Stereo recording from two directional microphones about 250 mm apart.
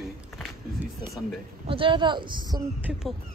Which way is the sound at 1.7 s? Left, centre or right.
Centre.